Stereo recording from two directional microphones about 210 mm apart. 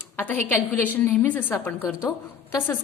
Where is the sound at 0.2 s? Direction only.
10° left (ahead or behind).